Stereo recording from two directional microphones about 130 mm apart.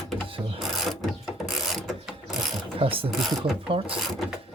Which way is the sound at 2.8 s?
45° right (ahead or behind).